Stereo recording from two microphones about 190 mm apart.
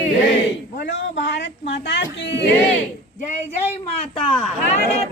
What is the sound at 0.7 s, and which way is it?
Speech, 65° left (ahead or behind).